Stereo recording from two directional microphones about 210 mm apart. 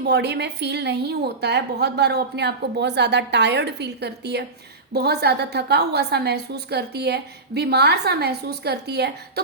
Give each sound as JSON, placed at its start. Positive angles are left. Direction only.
{"t": 0.0, "sound": "a woman's voice", "side_deg": -55}